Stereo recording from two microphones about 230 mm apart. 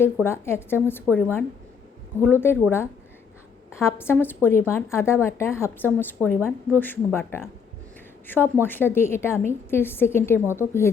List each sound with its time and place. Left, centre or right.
0.3 s a woman's voice: centre
8.6 s a woman's voice: centre